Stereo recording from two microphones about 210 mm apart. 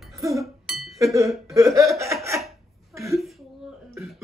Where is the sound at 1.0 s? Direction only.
15° right (ahead or behind).